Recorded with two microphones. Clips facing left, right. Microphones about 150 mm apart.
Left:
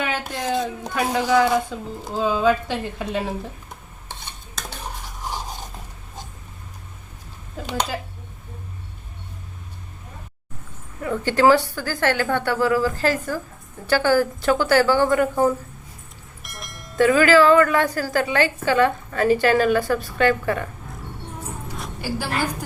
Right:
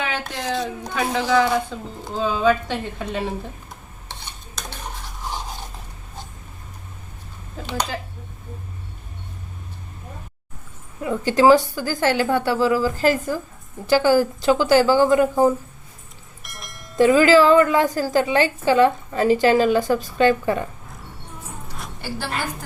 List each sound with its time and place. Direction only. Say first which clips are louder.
0.0 s a woman's voice: left 1 dB; 5° left (ahead or behind)
11.0 s a woman's voice: right 1 dB; 15° right (ahead or behind)
16.4 s bell: left 1 dB; centre (ahead or behind)
17.0 s a woman's voice: right 1 dB; 20° right (ahead or behind)